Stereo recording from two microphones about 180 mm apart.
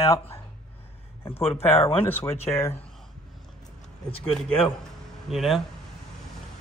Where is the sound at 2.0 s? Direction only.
15° left (ahead or behind).